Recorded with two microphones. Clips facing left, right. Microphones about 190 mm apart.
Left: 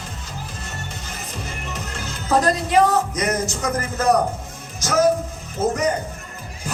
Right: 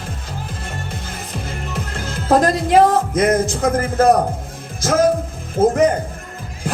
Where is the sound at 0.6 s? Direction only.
55° right (ahead or behind).